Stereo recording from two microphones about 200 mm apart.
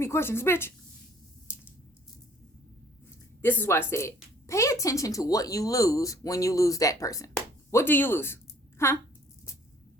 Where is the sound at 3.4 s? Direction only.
10° left (ahead or behind).